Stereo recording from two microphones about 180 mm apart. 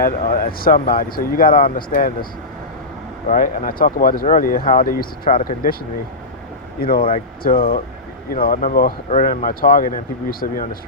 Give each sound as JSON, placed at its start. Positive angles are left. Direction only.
{"t": 0.0, "sound": "speech", "side_deg": 50}
{"t": 3.2, "sound": "speech", "side_deg": 45}
{"t": 6.8, "sound": "speech", "side_deg": 55}